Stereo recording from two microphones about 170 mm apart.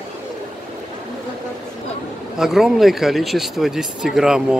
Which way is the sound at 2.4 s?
Centre (ahead or behind).